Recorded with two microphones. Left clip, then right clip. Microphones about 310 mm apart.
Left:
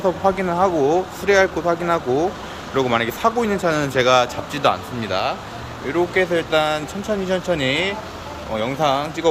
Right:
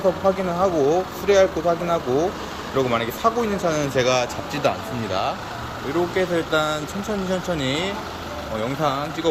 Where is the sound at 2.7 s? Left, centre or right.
Centre.